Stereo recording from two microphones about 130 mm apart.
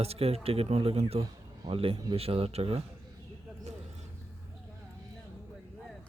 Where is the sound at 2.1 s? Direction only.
45° right (ahead or behind).